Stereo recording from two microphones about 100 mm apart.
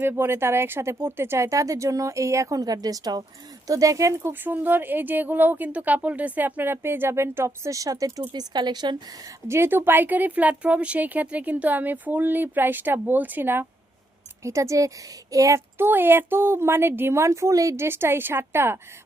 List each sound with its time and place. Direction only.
0.0 s speech: 20° right (ahead or behind)
8.3 s speech: 45° right (ahead or behind)
9.5 s a woman's voice: 25° right (ahead or behind)
14.4 s speech: 30° right (ahead or behind)
15.9 s speech: 20° right (ahead or behind)